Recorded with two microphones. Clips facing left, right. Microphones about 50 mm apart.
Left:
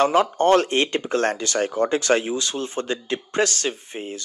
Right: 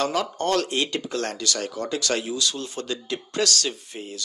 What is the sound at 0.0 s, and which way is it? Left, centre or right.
Speech, left.